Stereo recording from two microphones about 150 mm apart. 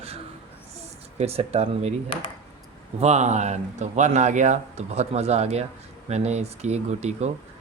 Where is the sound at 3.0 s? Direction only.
50° right (ahead or behind).